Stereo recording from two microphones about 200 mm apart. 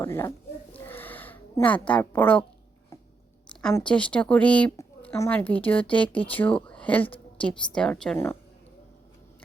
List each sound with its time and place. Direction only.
0.0 s speech: 15° left (ahead or behind)
0.9 s a sound: 10° left (ahead or behind)
3.6 s a woman's voice: 5° left (ahead or behind)